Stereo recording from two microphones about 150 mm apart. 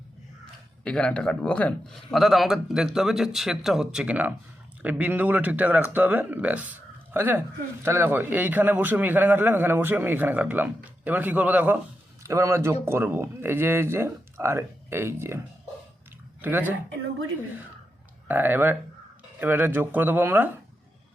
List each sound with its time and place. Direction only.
0.9 s a man's voice: 5° left (ahead or behind); by 15.4 s 15° right (ahead or behind)
16.4 s a man's voice: 10° right (ahead or behind)
18.3 s a man's voice: 10° right (ahead or behind)